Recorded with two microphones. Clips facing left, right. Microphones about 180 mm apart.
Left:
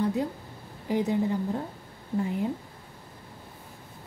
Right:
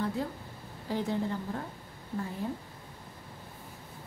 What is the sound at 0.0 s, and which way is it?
A woman's voice, 15° left (ahead or behind).